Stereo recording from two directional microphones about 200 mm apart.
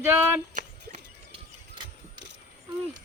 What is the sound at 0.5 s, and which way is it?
Horse, 35° right (ahead or behind).